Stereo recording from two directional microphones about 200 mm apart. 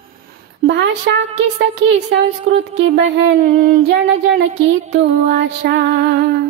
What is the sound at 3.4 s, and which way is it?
Child singing, 45° right (ahead or behind).